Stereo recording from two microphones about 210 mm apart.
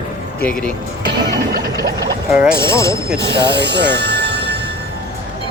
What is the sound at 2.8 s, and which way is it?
Speech, 15° left (ahead or behind).